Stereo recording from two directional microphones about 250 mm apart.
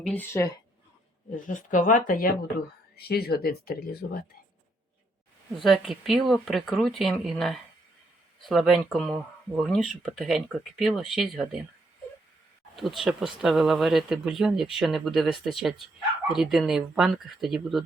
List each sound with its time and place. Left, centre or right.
0.0 s a woman's voice: centre
1.4 s speech: left
5.5 s speech: centre
12.7 s speech: centre